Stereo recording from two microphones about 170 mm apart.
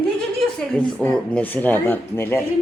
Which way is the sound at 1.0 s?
10° left (ahead or behind).